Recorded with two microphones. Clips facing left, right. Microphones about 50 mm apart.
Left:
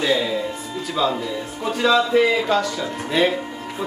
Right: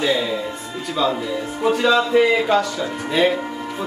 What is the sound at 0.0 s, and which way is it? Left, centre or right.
Speech, centre.